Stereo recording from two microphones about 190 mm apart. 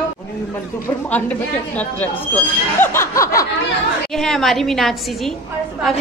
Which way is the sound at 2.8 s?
10° left (ahead or behind).